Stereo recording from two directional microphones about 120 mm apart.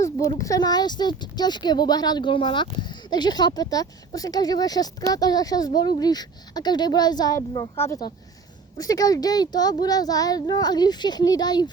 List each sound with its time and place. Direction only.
0.0 s speech: 25° left (ahead or behind)